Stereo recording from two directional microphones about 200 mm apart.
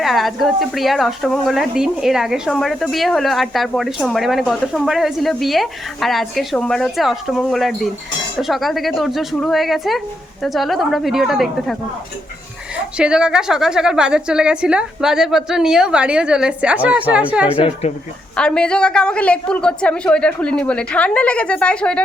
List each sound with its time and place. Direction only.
0.0 s a woman's voice: centre (ahead or behind)
17.5 s speech: 30° left (ahead or behind)
18.3 s a woman's voice: 5° left (ahead or behind)